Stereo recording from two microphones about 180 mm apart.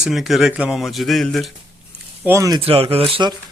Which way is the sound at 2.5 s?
30° right (ahead or behind).